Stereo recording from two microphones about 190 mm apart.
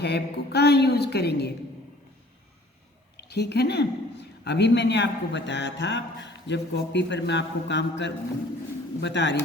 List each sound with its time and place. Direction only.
0.0 s a woman's voice: 60° left (ahead or behind)
3.2 s speech: 60° left (ahead or behind)